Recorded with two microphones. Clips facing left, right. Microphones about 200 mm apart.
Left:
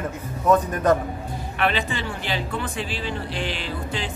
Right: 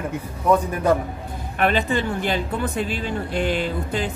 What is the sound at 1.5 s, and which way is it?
Speech, 45° right (ahead or behind).